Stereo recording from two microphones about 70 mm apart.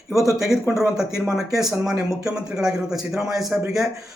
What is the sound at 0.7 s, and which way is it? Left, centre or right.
Speech, centre.